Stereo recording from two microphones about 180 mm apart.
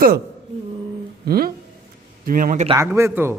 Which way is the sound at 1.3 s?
55° right (ahead or behind).